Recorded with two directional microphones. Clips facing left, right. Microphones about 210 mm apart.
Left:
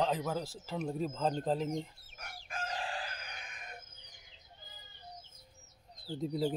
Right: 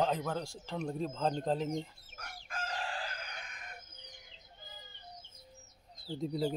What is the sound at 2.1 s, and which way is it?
Chicken, 20° left (ahead or behind).